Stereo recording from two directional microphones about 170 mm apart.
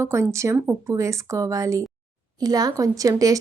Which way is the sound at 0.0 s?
15° right (ahead or behind).